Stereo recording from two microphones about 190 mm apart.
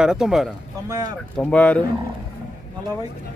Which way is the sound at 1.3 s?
5° left (ahead or behind).